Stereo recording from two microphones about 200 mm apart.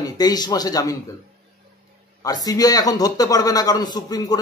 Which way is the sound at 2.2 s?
20° left (ahead or behind).